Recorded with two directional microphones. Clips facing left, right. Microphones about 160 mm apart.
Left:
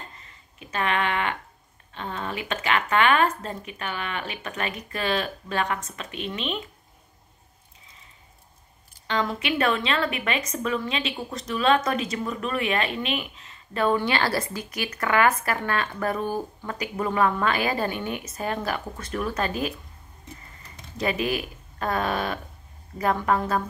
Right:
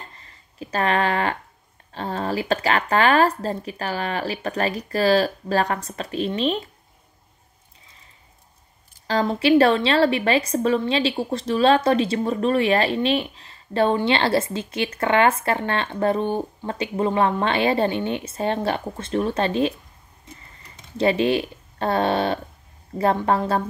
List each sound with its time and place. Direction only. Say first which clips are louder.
0.2 s a sound: right 9 dB; 35° right (ahead or behind)
1.9 s a woman's voice: right 6 dB; 35° right (ahead or behind)
9.0 s a woman's voice: right 6 dB; 35° right (ahead or behind)
21.0 s a woman's voice: right 7 dB; 30° right (ahead or behind)